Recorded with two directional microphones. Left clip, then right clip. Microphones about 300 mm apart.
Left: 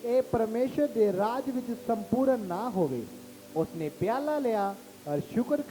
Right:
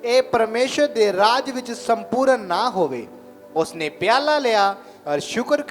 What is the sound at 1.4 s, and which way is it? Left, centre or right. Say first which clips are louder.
A man's voice: right 8 dB; centre.